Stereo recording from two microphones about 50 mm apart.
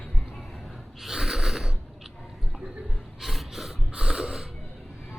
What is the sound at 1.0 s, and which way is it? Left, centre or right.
Snort, centre.